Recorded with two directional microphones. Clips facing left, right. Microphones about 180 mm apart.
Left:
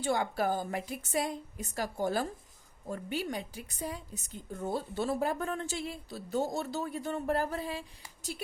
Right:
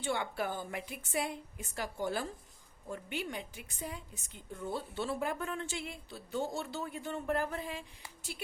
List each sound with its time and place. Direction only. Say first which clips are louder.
0.0 s a woman's voice: left 5 dB; 40° left (ahead or behind)